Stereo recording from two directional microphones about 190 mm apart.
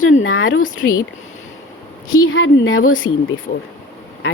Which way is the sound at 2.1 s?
90° left.